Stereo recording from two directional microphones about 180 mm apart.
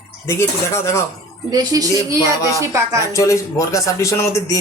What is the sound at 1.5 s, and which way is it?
Speech, 20° right (ahead or behind).